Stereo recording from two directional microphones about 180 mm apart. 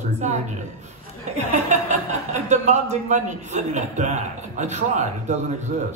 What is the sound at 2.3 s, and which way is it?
A man's voice, 40° right (ahead or behind).